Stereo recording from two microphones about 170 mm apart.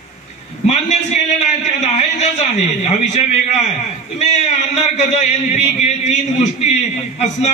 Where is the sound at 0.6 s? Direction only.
40° left (ahead or behind).